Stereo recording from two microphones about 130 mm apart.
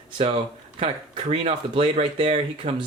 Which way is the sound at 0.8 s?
45° right (ahead or behind).